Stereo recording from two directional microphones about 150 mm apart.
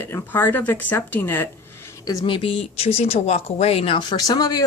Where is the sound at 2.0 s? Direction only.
25° left (ahead or behind).